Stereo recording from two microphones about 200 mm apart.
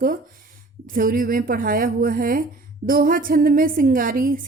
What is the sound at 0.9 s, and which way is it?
A woman's voice, 45° right (ahead or behind).